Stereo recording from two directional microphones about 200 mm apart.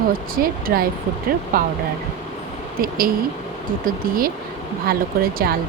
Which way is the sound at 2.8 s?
45° right (ahead or behind).